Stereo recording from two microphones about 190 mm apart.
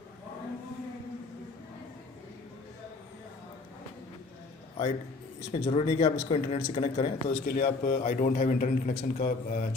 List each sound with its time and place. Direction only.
5.5 s speech: 30° left (ahead or behind)
7.4 s a man's voice: 45° left (ahead or behind)